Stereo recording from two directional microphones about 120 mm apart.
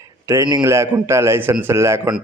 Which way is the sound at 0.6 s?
25° right (ahead or behind).